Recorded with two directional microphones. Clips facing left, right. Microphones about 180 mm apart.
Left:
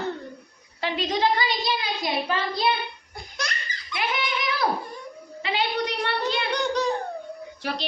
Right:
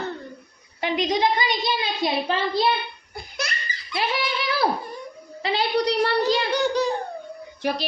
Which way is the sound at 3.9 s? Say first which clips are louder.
Right 2 dB; 30° right (ahead or behind).